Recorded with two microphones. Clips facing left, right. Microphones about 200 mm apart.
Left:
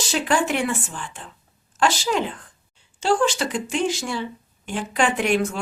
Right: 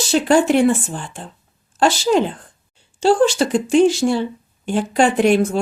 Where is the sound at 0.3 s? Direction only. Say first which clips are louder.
Right 10 dB; 30° right (ahead or behind).